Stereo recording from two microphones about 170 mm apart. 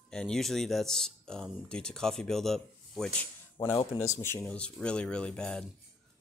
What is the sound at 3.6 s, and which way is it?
Speech, 20° left (ahead or behind).